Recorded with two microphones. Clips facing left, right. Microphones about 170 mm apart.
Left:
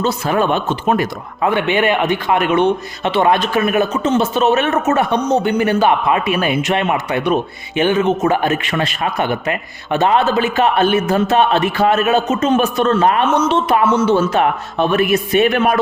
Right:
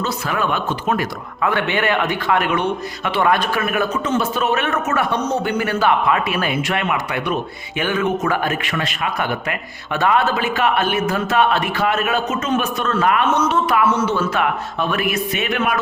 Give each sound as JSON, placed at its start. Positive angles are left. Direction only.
{"t": 0.0, "sound": "a man's voice", "side_deg": 30}